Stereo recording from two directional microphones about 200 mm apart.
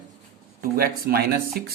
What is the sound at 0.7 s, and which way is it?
Speech, 50° right (ahead or behind).